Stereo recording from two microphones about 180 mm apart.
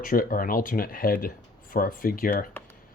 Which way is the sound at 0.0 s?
50° left (ahead or behind).